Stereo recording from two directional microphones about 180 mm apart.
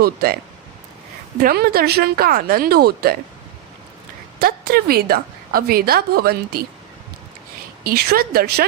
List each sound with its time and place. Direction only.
0.0 s a woman's voice: 60° right (ahead or behind)
1.4 s a woman's voice: 55° right (ahead or behind)
4.4 s a woman's voice: 60° right (ahead or behind)
7.9 s a woman's voice: 55° right (ahead or behind)